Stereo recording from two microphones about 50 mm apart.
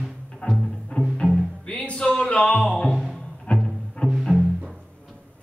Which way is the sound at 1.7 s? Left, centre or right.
Left.